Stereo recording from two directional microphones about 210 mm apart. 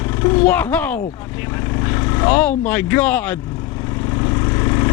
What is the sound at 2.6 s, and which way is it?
Speech, 10° left (ahead or behind).